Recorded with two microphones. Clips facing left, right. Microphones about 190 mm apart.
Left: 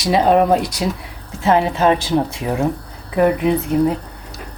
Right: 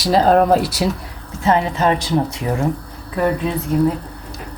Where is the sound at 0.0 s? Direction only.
Centre (ahead or behind).